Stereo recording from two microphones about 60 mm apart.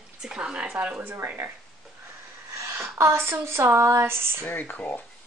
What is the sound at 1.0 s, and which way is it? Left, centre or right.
Speech, right.